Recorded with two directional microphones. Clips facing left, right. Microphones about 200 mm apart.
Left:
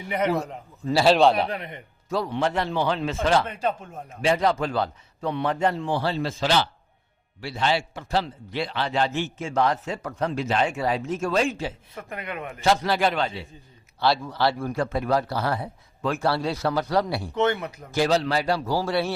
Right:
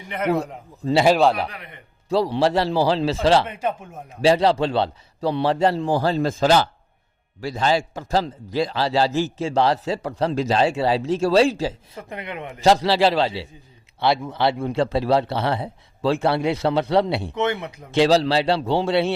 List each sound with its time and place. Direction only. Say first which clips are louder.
1.0 s a man's voice: even; 5° right (ahead or behind)
1.4 s a man's voice: left 3 dB; 25° left (ahead or behind)
2.0 s a man's voice: right 6 dB; 30° right (ahead or behind)
3.5 s speech: right 1 dB; 20° right (ahead or behind)
4.2 s a man's voice: right 5 dB; 30° right (ahead or behind)
11.9 s speech: right 1 dB; 20° right (ahead or behind)
12.6 s speech: right 5 dB; 30° right (ahead or behind)